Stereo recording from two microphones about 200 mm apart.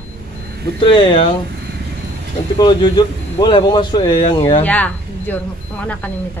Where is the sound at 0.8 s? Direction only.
25° left (ahead or behind).